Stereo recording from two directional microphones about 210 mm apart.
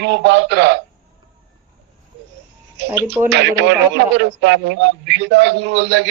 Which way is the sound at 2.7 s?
55° right (ahead or behind).